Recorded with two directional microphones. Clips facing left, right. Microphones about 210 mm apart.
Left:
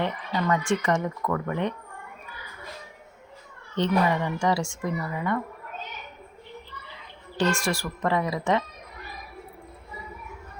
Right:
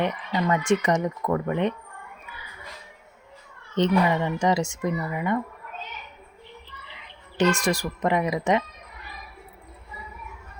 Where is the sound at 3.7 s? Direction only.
20° right (ahead or behind).